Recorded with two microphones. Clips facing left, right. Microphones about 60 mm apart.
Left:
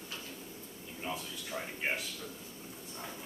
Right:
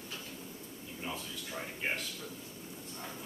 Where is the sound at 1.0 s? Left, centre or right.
Centre.